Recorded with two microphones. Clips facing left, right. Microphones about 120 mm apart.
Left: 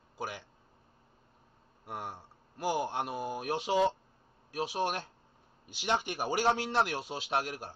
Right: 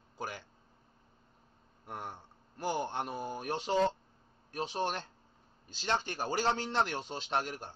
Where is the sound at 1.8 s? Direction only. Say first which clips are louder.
Left 2 dB; 5° left (ahead or behind).